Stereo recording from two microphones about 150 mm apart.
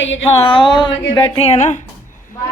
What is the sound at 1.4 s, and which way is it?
Speech, 50° left (ahead or behind).